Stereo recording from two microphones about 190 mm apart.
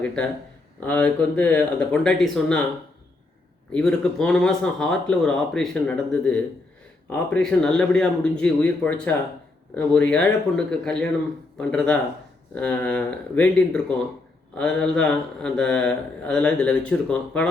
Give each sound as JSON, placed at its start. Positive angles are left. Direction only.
{"t": 0.9, "sound": "speech", "side_deg": 5}
{"t": 3.7, "sound": "a man's voice", "side_deg": 5}